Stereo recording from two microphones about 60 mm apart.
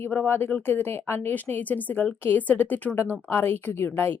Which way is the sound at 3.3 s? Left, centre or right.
Left.